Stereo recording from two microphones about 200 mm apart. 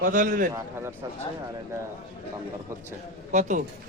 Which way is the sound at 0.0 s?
40° right (ahead or behind).